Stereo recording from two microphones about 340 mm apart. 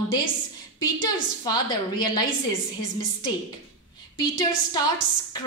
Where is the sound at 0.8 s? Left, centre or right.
Centre.